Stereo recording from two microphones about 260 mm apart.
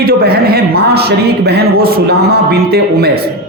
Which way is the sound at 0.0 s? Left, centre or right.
Right.